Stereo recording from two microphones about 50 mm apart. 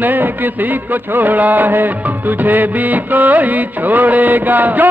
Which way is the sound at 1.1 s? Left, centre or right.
Right.